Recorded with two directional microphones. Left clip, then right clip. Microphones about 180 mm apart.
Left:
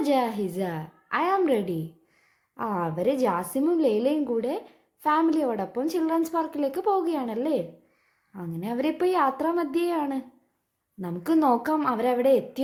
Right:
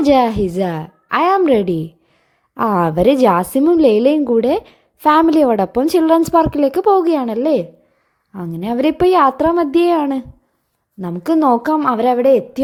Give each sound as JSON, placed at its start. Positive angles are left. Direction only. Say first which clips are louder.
{"t": 0.0, "sound": "a woman's voice", "louder": "right 12 dB", "side_deg": -40}
{"t": 2.6, "sound": "a woman's voice", "louder": "right 13 dB", "side_deg": -50}